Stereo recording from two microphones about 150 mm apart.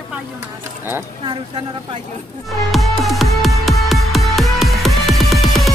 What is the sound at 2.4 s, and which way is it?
Music, centre (ahead or behind).